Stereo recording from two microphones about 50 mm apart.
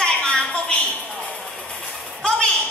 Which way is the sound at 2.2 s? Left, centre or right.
Centre.